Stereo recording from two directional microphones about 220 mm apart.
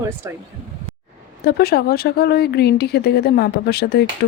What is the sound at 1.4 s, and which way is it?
Speech, 45° left (ahead or behind).